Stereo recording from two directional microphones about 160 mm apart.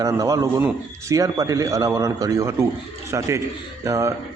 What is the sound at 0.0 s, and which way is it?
A man's voice, 20° right (ahead or behind).